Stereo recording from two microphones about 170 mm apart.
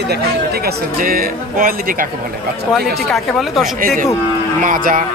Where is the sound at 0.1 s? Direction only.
70° right (ahead or behind).